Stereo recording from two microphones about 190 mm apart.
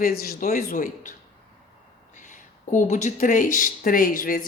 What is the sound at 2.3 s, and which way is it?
Speech, 40° left (ahead or behind).